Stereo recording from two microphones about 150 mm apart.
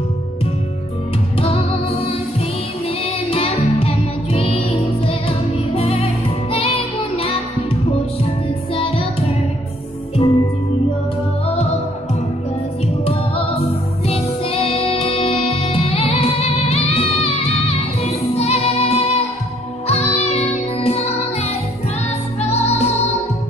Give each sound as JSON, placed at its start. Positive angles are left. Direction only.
{"t": 1.4, "sound": "music", "side_deg": 40}
{"t": 3.3, "sound": "music", "side_deg": 40}
{"t": 8.7, "sound": "music", "side_deg": 40}
{"t": 10.2, "sound": "music", "side_deg": 35}
{"t": 14.0, "sound": "music", "side_deg": 40}